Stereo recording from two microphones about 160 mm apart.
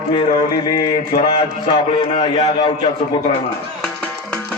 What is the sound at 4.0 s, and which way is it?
Music, 5° left (ahead or behind).